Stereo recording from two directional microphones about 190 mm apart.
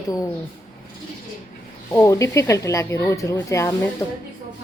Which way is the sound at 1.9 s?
15° left (ahead or behind).